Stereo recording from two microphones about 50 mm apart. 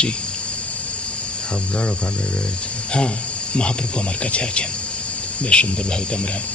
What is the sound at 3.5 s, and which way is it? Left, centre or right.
Speech, left.